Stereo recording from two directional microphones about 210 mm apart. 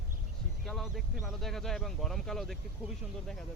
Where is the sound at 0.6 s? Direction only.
Centre (ahead or behind).